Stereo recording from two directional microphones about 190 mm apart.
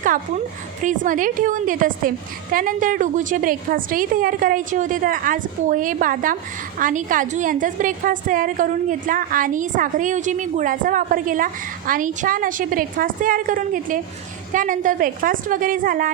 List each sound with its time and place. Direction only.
0.8 s a woman's voice: 45° right (ahead or behind)